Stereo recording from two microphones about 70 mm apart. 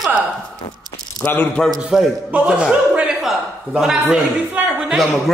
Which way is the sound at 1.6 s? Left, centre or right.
Centre.